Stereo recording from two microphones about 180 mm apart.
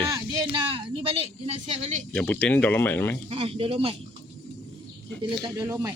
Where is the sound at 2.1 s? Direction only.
5° left (ahead or behind).